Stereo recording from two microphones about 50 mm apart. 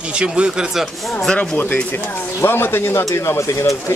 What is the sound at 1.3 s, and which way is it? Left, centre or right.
Speech, centre.